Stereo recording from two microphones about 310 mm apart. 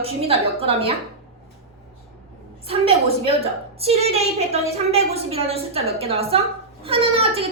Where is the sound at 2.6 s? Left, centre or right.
Centre.